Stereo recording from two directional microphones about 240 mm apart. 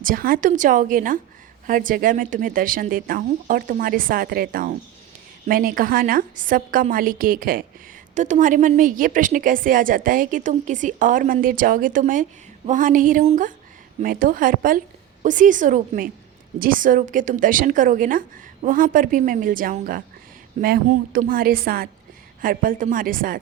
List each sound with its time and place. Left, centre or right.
0.0 s a woman's voice: right